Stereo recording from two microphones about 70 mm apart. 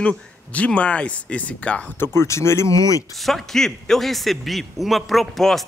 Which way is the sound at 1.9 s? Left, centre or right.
Left.